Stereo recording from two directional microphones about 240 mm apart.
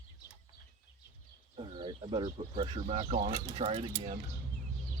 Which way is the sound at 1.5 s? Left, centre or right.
Centre.